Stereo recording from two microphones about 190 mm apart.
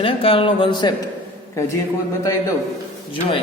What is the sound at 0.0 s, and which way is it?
Speech, 30° left (ahead or behind).